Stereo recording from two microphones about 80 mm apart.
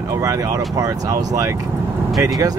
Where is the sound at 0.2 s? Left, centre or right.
Right.